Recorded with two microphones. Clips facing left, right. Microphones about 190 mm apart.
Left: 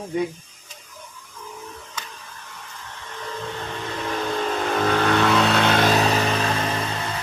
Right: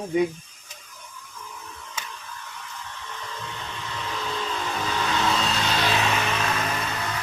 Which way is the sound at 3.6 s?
55° left (ahead or behind).